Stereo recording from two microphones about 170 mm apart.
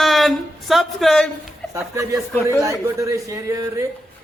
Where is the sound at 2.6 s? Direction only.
20° right (ahead or behind).